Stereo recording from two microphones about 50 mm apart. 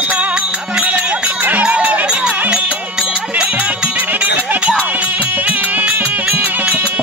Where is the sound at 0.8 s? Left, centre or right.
Right.